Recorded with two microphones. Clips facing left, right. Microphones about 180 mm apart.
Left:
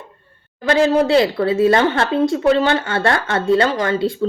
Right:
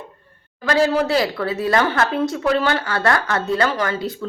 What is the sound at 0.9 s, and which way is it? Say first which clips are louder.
Speech: left 5 dB; 25° left (ahead or behind).